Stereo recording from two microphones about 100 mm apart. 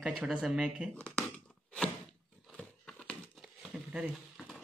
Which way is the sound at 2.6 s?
10° left (ahead or behind).